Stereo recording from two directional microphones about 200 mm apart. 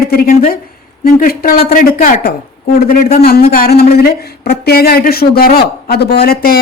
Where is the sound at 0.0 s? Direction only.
50° left (ahead or behind).